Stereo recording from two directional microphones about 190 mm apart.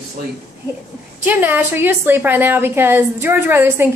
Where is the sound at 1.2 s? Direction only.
10° right (ahead or behind).